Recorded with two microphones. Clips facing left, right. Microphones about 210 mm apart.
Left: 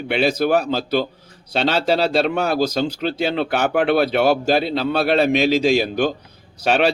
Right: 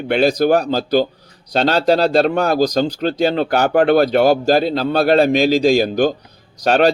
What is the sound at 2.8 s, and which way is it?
A man's voice, 40° right (ahead or behind).